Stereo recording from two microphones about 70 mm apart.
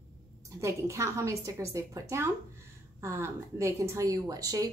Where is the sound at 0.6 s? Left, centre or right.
Right.